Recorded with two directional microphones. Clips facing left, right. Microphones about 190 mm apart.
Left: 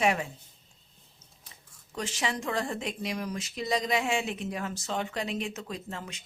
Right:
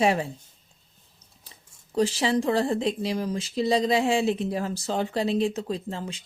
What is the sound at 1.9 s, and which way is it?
Speech, 35° right (ahead or behind).